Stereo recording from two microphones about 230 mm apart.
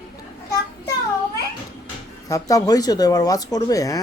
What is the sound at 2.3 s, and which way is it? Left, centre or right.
Speech, centre.